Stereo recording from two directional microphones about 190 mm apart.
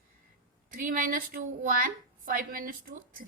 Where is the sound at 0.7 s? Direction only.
45° right (ahead or behind).